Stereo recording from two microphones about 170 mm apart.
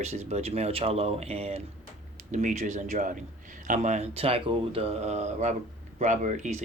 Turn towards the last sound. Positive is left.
turn(degrees=-45)  # may be behind; listen again after turning